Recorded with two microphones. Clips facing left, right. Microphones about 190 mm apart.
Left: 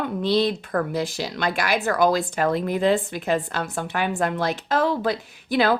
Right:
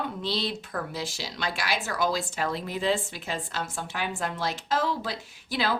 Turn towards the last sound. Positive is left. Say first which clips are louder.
# left 8 dB
turn(degrees=55)  # may be behind; listen again after turning